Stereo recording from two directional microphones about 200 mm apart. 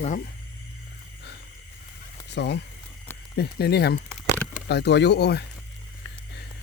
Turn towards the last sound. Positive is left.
turn(degrees=55)  # may be behind; listen again after turning